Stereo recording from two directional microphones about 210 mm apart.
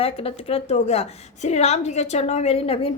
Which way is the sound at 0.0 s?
25° left (ahead or behind).